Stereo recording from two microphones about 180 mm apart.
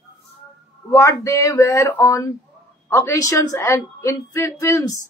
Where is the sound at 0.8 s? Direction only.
15° left (ahead or behind).